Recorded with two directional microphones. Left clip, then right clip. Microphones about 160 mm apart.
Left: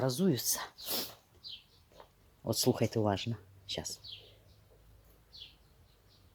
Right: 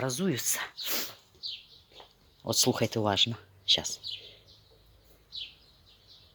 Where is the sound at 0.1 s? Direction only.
20° left (ahead or behind).